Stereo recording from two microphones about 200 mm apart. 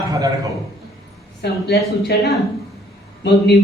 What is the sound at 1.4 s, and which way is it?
Speech, 55° left (ahead or behind).